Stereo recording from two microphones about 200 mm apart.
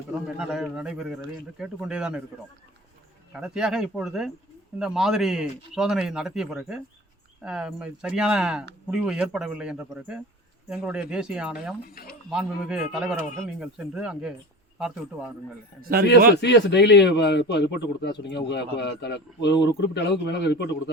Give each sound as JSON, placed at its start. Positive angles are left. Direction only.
{"t": 0.3, "sound": "speech", "side_deg": -5}
{"t": 3.3, "sound": "speech", "side_deg": -5}
{"t": 15.8, "sound": "a man's voice", "side_deg": -50}
{"t": 16.3, "sound": "speech", "side_deg": 60}